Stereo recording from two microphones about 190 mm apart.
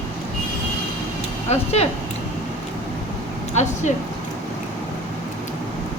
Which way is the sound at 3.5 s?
40° left (ahead or behind).